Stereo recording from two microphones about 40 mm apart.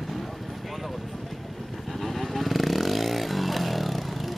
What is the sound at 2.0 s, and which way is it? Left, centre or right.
Vehicle, centre.